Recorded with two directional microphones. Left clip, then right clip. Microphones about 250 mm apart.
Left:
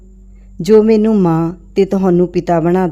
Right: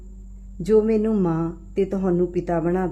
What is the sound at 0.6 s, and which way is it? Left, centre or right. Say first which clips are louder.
Speech: left 9 dB; left.